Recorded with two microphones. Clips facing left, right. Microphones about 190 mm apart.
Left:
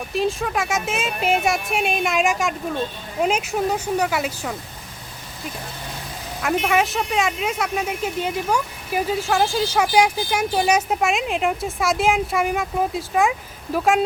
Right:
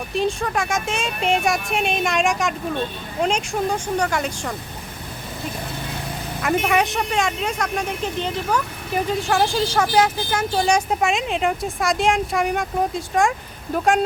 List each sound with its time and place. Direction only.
0.1 s speech: centre (ahead or behind)
6.4 s speech: centre (ahead or behind)